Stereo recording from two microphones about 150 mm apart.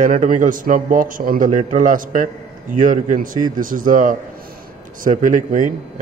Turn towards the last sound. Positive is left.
turn(degrees=-60)  # may be behind; listen again after turning